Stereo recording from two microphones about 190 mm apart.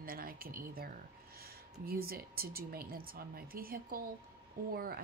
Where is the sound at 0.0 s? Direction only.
50° right (ahead or behind).